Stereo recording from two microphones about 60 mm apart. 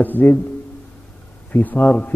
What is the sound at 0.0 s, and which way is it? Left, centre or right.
Speech, left.